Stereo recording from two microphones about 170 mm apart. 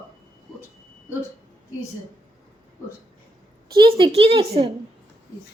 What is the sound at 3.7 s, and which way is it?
Speech, 30° right (ahead or behind).